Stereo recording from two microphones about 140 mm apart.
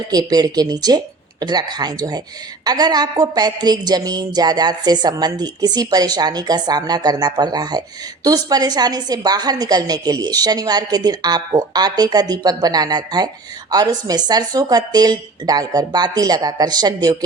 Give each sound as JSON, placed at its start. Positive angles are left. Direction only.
{"t": 0.1, "sound": "a woman's voice", "side_deg": -30}